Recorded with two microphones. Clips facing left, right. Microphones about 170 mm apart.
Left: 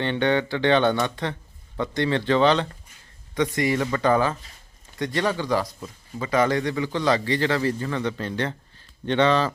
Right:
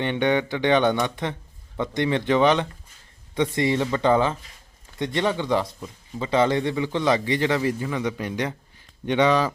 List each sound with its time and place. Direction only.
0.0 s a man's voice: 15° right (ahead or behind)